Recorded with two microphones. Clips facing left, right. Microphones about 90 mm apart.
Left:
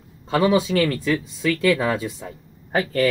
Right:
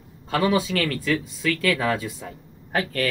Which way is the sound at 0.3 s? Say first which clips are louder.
Left 3 dB; 20° left (ahead or behind).